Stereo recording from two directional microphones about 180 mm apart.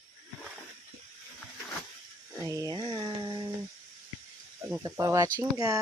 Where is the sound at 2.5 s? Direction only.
20° right (ahead or behind).